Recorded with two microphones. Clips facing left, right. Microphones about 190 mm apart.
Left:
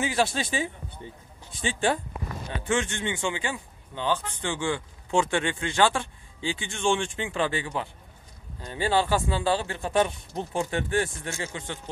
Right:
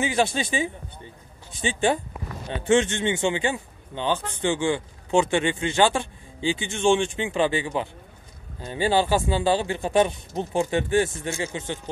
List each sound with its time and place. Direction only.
0.2 s speech: centre (ahead or behind)
1.6 s a man's voice: 20° right (ahead or behind)